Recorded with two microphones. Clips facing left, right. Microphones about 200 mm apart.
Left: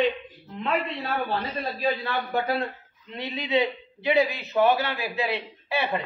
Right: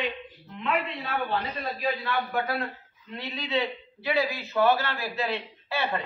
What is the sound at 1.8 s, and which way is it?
A man's voice, 25° left (ahead or behind).